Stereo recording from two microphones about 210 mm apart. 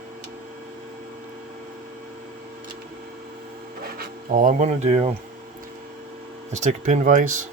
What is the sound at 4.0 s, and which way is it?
Speech, 40° right (ahead or behind).